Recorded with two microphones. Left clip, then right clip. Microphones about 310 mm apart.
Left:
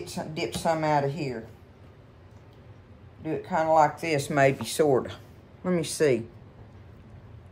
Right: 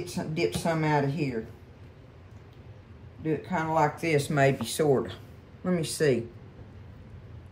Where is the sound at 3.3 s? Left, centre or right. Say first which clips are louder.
Left 5 dB; centre.